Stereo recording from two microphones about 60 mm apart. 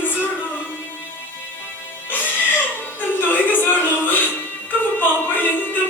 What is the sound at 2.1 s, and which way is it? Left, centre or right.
Music, left.